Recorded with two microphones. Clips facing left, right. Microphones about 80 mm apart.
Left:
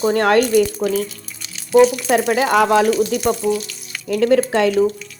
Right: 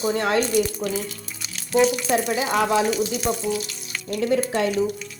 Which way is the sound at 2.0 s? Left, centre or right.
Left.